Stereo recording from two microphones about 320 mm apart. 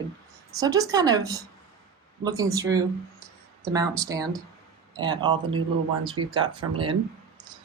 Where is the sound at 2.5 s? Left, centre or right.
Centre.